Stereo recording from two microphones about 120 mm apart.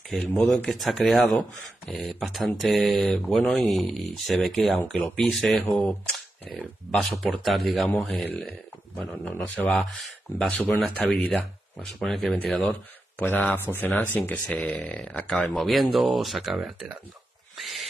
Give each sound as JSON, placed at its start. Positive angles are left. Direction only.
{"t": 0.1, "sound": "speech", "side_deg": 0}
{"t": 5.6, "sound": "speech", "side_deg": 15}
{"t": 7.4, "sound": "speech", "side_deg": 0}
{"t": 8.3, "sound": "speech", "side_deg": 15}
{"t": 13.2, "sound": "speech", "side_deg": 15}
{"t": 16.5, "sound": "speech", "side_deg": -10}
{"t": 17.6, "sound": "owl", "side_deg": 0}